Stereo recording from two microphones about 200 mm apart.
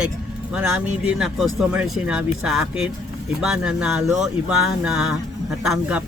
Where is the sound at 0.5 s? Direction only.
5° right (ahead or behind).